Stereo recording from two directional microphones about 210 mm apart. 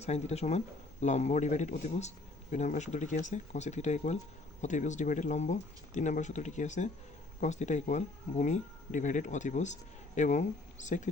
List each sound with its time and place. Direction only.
0.0 s speech: 30° left (ahead or behind)